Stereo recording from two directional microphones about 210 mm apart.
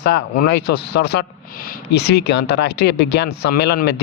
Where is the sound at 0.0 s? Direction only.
50° left (ahead or behind).